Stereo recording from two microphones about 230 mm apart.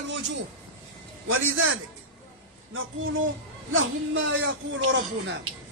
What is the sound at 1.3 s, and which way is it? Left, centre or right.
Speech, right.